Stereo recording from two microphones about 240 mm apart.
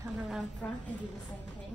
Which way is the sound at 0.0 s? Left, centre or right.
Centre.